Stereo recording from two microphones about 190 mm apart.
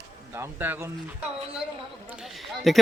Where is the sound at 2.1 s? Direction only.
Centre (ahead or behind).